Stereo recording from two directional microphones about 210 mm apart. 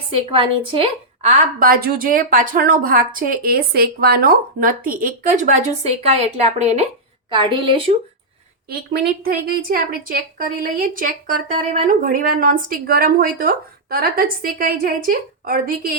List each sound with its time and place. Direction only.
0.1 s a woman's voice: 25° right (ahead or behind)
8.9 s a woman's voice: 45° right (ahead or behind)